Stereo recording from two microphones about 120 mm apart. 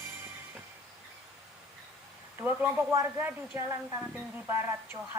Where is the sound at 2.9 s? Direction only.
25° right (ahead or behind).